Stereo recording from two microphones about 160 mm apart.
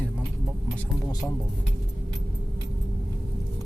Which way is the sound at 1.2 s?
15° left (ahead or behind).